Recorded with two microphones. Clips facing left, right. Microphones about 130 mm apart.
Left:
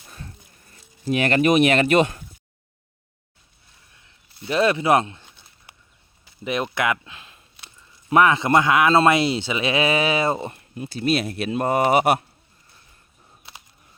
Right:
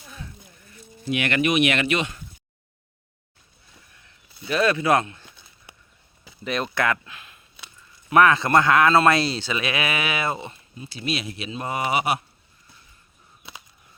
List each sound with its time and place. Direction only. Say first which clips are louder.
0.7 s speech: left 3 dB; 35° left (ahead or behind)
3.9 s speech: even; 25° left (ahead or behind)
6.4 s speech: left 1 dB; 15° left (ahead or behind)
7.1 s a sound: even; 30° left (ahead or behind)
8.1 s speech: even; 20° left (ahead or behind); by 10.5 s 35° left (ahead or behind)
10.5 s speech: left 7 dB; 55° left (ahead or behind)